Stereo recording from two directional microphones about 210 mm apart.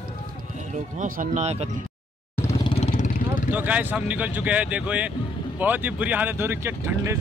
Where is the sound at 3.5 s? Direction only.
5° right (ahead or behind).